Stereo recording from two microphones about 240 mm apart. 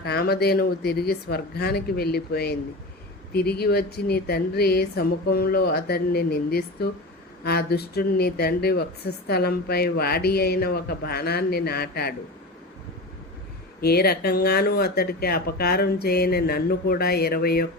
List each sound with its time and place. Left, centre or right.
0.0 s speech: left
13.8 s speech: left